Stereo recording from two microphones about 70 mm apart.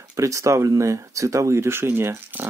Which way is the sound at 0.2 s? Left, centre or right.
Right.